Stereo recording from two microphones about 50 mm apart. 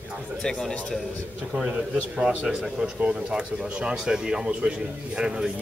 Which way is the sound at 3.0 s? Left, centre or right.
Right.